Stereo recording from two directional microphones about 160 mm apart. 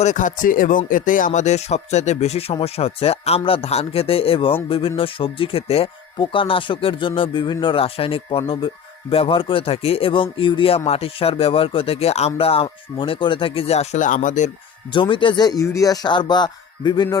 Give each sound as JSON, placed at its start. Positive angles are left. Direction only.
{"t": 0.0, "sound": "speech", "side_deg": 50}
{"t": 14.8, "sound": "speech", "side_deg": 30}